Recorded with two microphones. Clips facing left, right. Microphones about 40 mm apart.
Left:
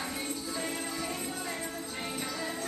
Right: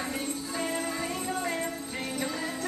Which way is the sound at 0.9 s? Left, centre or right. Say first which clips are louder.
Right 4 dB; right.